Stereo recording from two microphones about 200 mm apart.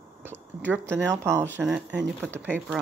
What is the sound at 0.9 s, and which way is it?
Speech, 15° right (ahead or behind).